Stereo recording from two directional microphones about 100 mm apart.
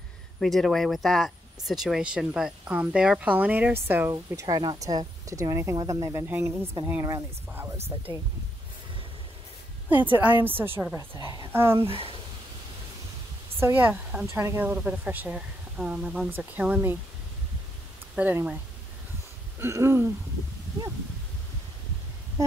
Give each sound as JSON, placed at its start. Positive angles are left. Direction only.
{"t": 0.4, "sound": "speech", "side_deg": 0}
{"t": 4.1, "sound": "speech", "side_deg": -35}
{"t": 6.2, "sound": "speech", "side_deg": -20}
{"t": 8.1, "sound": "speech", "side_deg": -40}
{"t": 9.8, "sound": "speech", "side_deg": -20}
{"t": 13.6, "sound": "speech", "side_deg": -20}
{"t": 18.1, "sound": "speech", "side_deg": -15}
{"t": 19.6, "sound": "speech", "side_deg": -25}